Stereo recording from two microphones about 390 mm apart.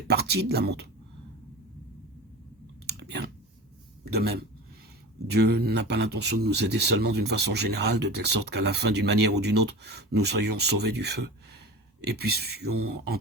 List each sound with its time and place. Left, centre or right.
0.1 s speech: right
2.8 s clicking: right
4.0 s a man's voice: right